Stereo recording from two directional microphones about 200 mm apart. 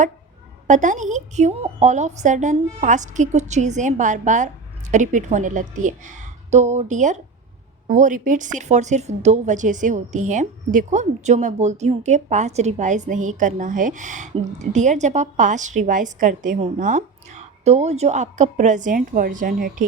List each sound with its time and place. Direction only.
0.7 s a woman's voice: 40° right (ahead or behind)